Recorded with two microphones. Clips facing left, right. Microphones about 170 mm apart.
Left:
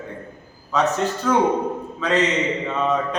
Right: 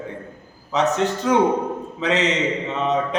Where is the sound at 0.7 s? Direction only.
20° right (ahead or behind).